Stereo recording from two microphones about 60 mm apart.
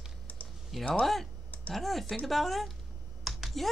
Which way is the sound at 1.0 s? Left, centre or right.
Centre.